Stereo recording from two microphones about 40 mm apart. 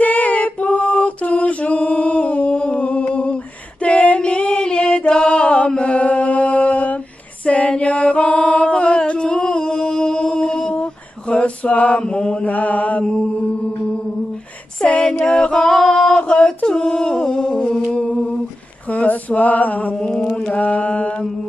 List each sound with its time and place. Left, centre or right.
0.0 s a sound: left
3.8 s music: left
5.8 s mantra: left
7.4 s music: left; by 10.7 s centre
10.7 s male singing: left
12.0 s mantra: centre
12.4 s mantra: left
14.9 s a sound: left
15.4 s a sound: centre
17.9 s a sound: left
20.0 s mantra: centre
20.5 s mantra: left